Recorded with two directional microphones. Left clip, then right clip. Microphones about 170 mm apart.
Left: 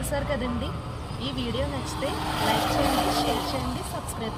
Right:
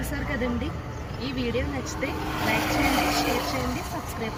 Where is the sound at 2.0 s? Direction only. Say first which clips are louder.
Left 2 dB; 5° left (ahead or behind); by 3.7 s 10° right (ahead or behind).